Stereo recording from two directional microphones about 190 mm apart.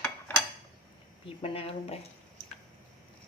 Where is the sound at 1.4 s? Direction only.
30° left (ahead or behind).